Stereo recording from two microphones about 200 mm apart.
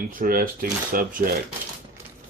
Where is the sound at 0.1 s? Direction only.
45° right (ahead or behind).